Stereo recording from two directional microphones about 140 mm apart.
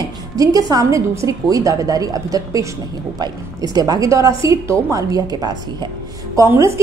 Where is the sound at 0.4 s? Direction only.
25° right (ahead or behind).